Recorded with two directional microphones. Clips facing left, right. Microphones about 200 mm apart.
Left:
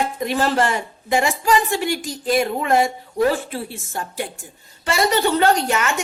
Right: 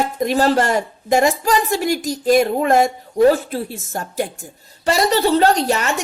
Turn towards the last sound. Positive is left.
turn(degrees=-35)  # may be behind; listen again after turning